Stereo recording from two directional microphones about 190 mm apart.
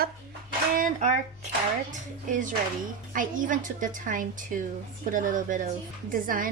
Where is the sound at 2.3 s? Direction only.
45° right (ahead or behind).